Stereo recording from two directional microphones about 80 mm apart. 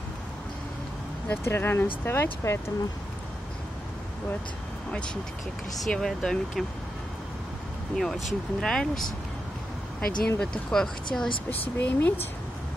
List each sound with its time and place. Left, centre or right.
1.3 s speech: left
5.8 s speech: centre
7.9 s speech: centre
11.5 s speech: left